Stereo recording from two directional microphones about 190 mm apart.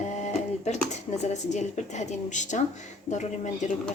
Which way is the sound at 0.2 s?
35° left (ahead or behind).